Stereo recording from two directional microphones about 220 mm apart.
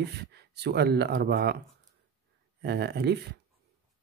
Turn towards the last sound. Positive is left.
turn(degrees=-50)  # may be behind; listen again after turning